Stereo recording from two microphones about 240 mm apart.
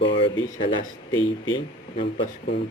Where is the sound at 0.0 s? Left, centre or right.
Left.